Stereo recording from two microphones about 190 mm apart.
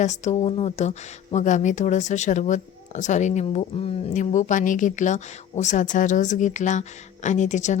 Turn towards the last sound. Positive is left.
turn(degrees=40)  # may be behind; listen again after turning